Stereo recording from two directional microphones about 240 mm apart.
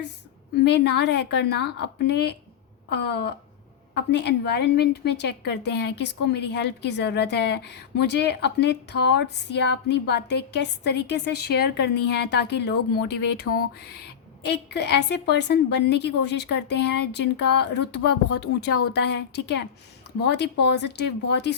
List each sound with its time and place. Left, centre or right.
0.5 s a woman's voice: left